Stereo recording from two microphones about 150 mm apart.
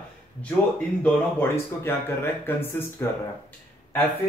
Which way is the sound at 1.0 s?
15° left (ahead or behind).